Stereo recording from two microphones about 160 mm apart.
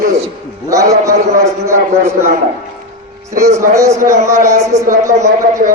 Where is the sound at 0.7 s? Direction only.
20° right (ahead or behind).